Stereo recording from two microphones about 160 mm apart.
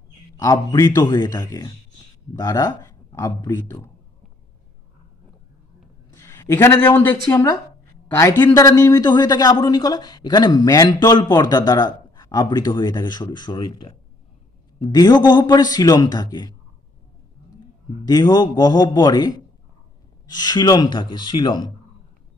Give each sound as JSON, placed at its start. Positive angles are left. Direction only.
{"t": 0.4, "sound": "a man's voice", "side_deg": 20}
{"t": 6.1, "sound": "a man's voice", "side_deg": 20}
{"t": 18.0, "sound": "a man's voice", "side_deg": 25}